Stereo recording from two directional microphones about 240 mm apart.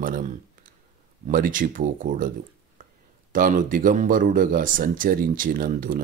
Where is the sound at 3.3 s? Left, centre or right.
Right.